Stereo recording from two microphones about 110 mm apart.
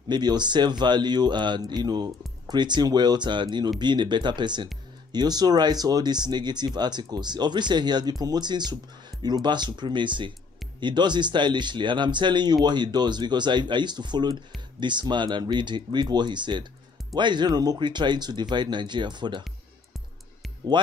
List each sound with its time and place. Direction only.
0.1 s speech: 40° right (ahead or behind)
20.7 s speech: 45° right (ahead or behind)